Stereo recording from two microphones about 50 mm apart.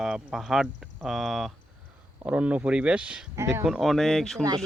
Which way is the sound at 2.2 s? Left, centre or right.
Right.